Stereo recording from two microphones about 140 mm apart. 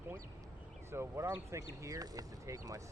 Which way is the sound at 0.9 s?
20° right (ahead or behind).